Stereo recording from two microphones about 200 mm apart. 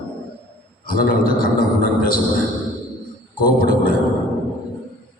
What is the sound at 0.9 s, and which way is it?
A man's voice, 45° left (ahead or behind).